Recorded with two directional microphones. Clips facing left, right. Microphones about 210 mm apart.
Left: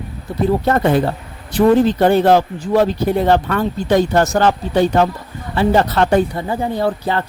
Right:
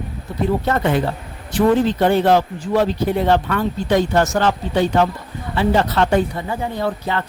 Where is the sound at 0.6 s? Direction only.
40° left (ahead or behind).